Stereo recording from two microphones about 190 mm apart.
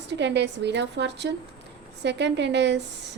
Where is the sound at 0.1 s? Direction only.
65° right (ahead or behind).